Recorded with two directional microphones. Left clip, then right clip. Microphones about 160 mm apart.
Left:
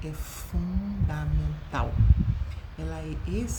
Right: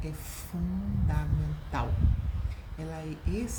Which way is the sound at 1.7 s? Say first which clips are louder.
Left 3 dB; 15° left (ahead or behind).